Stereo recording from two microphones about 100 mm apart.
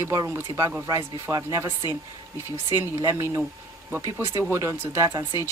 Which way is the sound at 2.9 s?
25° right (ahead or behind).